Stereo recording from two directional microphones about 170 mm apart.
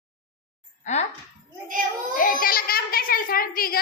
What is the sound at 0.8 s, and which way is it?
Speech, 40° left (ahead or behind).